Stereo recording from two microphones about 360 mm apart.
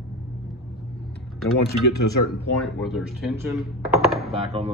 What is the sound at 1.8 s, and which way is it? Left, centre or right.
Speech, left.